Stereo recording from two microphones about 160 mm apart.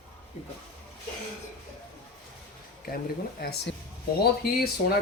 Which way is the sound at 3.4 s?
90° left.